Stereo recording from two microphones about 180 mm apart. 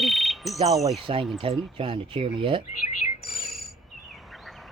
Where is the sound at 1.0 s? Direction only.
30° right (ahead or behind).